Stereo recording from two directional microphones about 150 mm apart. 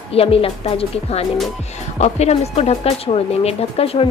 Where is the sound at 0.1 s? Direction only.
40° left (ahead or behind).